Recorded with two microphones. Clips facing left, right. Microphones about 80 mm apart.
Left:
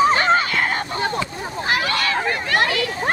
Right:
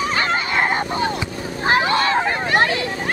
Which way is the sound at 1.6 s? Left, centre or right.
Right.